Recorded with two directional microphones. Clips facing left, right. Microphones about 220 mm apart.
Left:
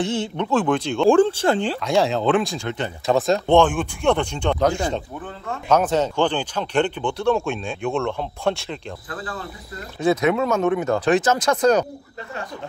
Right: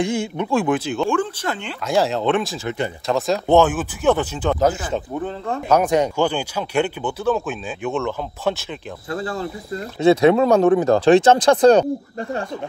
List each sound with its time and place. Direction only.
0.0 s speech: 10° right (ahead or behind)
1.1 s speech: 30° left (ahead or behind)
1.8 s speech: centre (ahead or behind)
9.1 s cricket: 25° right (ahead or behind)
9.9 s speech: 30° right (ahead or behind)